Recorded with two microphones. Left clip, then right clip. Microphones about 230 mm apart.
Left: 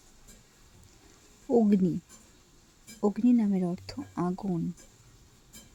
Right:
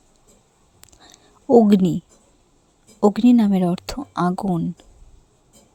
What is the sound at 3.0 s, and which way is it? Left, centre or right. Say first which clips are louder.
Speech: right 10 dB; right.